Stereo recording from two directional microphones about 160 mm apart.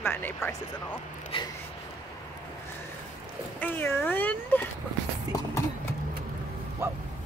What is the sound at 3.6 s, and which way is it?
Speech, 10° left (ahead or behind).